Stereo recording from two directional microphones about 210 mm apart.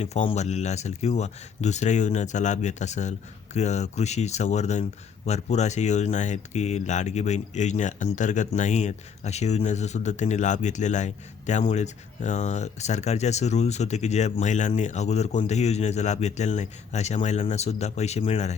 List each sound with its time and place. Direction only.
0.0 s speech: 30° left (ahead or behind)